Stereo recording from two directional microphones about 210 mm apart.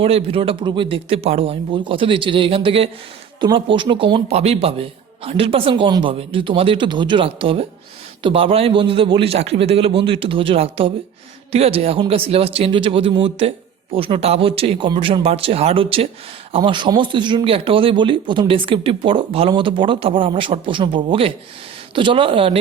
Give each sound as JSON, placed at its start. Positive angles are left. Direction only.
{"t": 0.0, "sound": "speech", "side_deg": -25}